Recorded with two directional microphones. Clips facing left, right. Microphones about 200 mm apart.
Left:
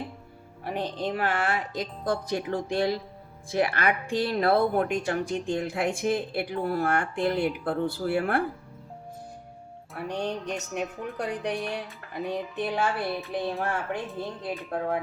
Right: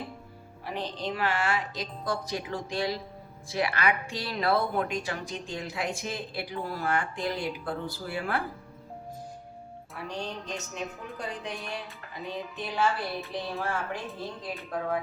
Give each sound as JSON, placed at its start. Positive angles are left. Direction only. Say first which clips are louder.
{"t": 0.6, "sound": "speech", "louder": "left 4 dB", "side_deg": 55}
{"t": 10.1, "sound": "speech", "louder": "left 6 dB", "side_deg": 60}
{"t": 14.1, "sound": "a woman's voice", "louder": "left 4 dB", "side_deg": 0}